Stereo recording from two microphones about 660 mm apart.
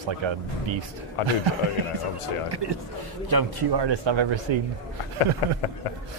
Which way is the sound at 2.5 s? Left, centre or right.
Right.